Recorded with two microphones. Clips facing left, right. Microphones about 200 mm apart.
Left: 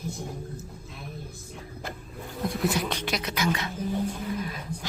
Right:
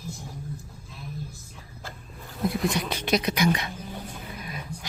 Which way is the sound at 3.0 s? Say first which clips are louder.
Right 5 dB; 15° right (ahead or behind).